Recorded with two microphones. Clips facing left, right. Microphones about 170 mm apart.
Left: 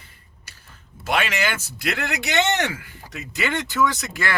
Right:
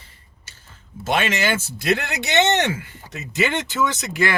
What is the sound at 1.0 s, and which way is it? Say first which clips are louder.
A man's voice: right 2 dB; 25° right (ahead or behind).